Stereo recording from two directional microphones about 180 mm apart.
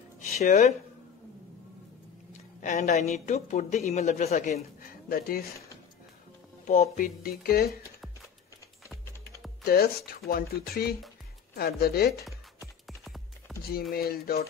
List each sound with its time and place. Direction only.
0.4 s speech: 40° left (ahead or behind)
2.6 s speech: 40° left (ahead or behind); by 5.5 s 55° left (ahead or behind)
6.6 s speech: 45° left (ahead or behind)
7.2 s speech: 60° left (ahead or behind)
9.7 s speech: 60° left (ahead or behind)
12.8 s music: centre (ahead or behind)
13.5 s a sound: centre (ahead or behind)
13.9 s speech: 60° left (ahead or behind)